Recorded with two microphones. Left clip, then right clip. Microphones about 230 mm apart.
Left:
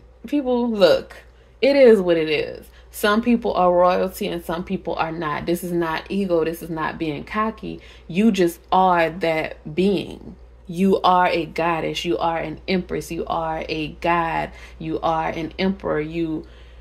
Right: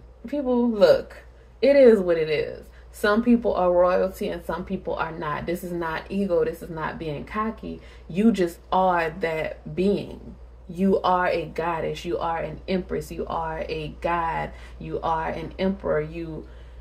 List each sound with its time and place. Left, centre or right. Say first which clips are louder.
0.2 s speech: left 3 dB; left